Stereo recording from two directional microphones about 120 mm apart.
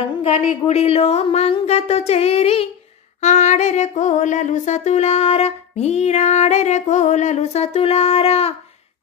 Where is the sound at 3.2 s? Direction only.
75° left (ahead or behind).